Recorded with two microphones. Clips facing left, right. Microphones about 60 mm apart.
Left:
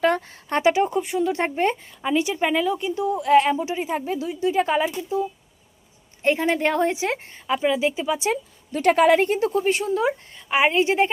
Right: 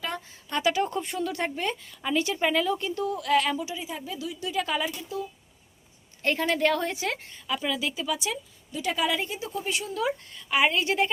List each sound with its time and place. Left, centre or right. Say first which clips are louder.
0.0 s speech: left 13 dB; left
0.6 s a woman's voice: left 6 dB; left
2.0 s a woman's voice: left 3 dB; centre
8.7 s a woman's voice: left 11 dB; left